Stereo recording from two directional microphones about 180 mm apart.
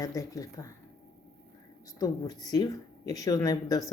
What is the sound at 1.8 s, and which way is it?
Speech, 20° left (ahead or behind).